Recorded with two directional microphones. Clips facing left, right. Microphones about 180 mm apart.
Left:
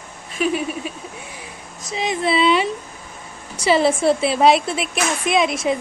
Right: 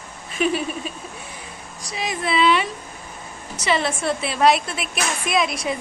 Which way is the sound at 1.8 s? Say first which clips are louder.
Left 5 dB; 25° left (ahead or behind).